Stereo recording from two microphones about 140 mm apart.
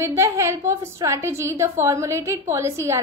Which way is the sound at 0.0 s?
20° right (ahead or behind).